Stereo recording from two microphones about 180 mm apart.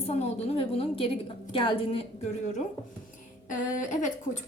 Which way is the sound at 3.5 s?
45° left (ahead or behind).